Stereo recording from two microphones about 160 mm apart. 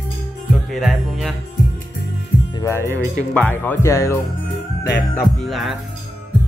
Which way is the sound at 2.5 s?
20° left (ahead or behind).